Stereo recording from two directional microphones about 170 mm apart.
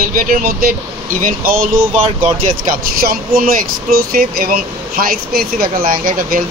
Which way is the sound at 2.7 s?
60° right (ahead or behind).